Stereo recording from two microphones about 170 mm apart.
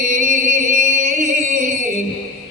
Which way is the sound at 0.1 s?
50° right (ahead or behind).